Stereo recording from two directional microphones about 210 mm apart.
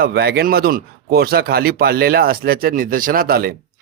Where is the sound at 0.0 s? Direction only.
50° right (ahead or behind).